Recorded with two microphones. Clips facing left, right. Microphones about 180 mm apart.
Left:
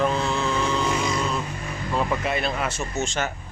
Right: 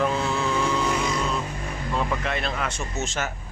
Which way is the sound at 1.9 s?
5° left (ahead or behind).